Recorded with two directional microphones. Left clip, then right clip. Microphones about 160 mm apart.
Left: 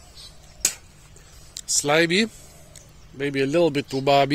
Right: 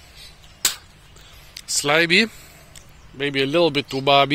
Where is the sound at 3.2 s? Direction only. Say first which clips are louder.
Right 2 dB; 25° left (ahead or behind).